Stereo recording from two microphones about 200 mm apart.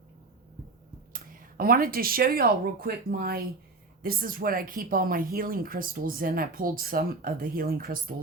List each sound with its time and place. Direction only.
1.1 s speech: 45° right (ahead or behind)